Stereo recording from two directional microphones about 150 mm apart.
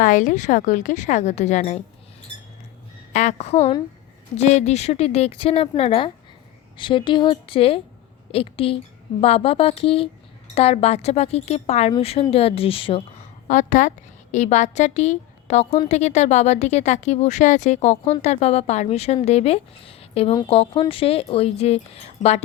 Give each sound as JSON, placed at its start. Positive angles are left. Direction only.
{"t": 0.0, "sound": "a woman's voice", "side_deg": 60}
{"t": 3.1, "sound": "speech", "side_deg": 50}
{"t": 13.5, "sound": "a woman's voice", "side_deg": 60}